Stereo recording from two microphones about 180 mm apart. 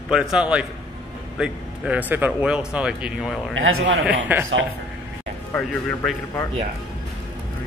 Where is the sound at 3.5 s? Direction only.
90° right.